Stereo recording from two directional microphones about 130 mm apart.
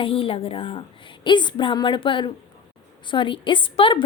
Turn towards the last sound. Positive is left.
turn(degrees=40)  # may be behind; listen again after turning